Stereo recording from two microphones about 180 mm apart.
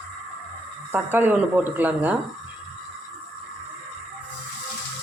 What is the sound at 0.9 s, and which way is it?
Speech, 10° right (ahead or behind).